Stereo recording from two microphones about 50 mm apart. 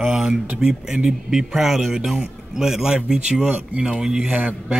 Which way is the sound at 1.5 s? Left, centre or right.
Centre.